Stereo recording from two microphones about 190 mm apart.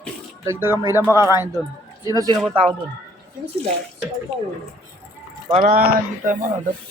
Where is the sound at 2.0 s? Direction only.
20° right (ahead or behind).